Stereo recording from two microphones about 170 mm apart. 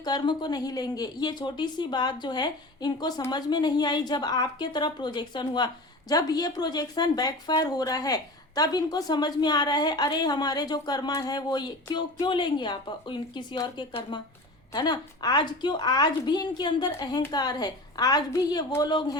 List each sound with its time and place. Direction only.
0.0 s a woman's voice: 25° left (ahead or behind)